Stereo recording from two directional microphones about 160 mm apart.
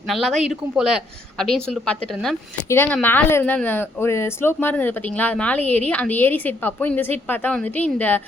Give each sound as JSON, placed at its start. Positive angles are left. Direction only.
{"t": 0.1, "sound": "a woman's voice", "side_deg": 0}